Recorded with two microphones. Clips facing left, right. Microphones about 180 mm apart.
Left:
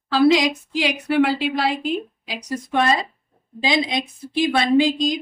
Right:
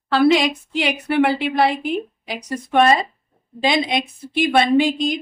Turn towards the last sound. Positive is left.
turn(degrees=-60)  # may be behind; listen again after turning